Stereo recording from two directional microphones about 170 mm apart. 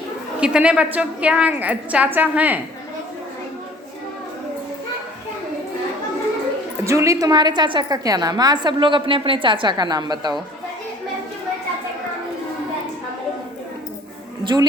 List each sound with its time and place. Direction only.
0.3 s a woman's voice: 5° right (ahead or behind)
6.8 s a woman's voice: 20° right (ahead or behind)
14.4 s a man's voice: 25° right (ahead or behind)